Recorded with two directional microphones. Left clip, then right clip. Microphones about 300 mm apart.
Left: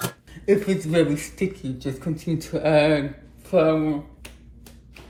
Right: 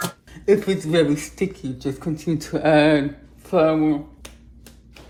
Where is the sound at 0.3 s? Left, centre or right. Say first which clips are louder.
Right 2 dB; right.